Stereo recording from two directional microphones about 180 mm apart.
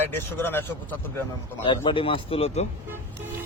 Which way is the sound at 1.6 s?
30° left (ahead or behind).